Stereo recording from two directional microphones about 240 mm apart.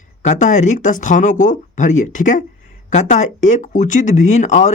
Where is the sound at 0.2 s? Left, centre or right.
Left.